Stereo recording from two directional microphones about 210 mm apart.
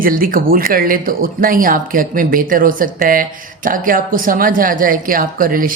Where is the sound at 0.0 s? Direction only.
40° right (ahead or behind).